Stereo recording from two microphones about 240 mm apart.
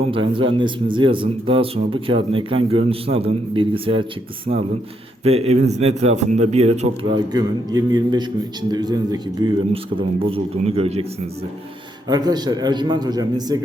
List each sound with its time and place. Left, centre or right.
0.0 s speech: right
7.7 s a man's voice: centre
12.0 s a man's voice: centre